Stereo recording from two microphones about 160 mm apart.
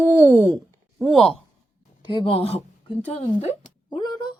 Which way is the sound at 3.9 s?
30° left (ahead or behind).